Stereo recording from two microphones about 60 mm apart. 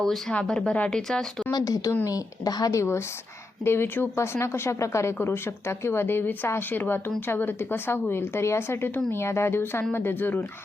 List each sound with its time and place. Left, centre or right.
0.0 s speech: centre
1.5 s a woman's voice: left
3.6 s speech: left
4.2 s speech: left
5.2 s speech: left